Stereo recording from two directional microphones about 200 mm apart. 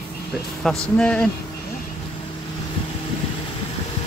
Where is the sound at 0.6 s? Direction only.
Centre (ahead or behind).